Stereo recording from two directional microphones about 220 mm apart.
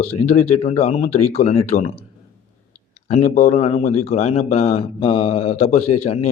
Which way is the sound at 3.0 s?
35° left (ahead or behind).